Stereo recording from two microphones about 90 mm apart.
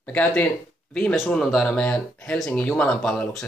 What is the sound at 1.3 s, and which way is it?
Speech, 5° left (ahead or behind).